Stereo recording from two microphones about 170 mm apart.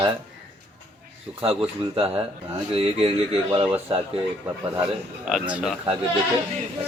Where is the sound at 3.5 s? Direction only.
35° right (ahead or behind).